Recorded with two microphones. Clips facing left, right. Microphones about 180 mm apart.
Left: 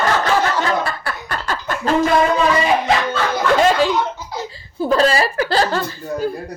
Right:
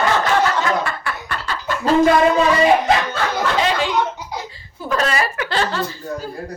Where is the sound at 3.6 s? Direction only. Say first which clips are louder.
Left 6 dB; 45° left (ahead or behind).